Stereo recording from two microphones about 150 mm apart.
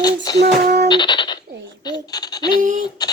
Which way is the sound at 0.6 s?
90° right.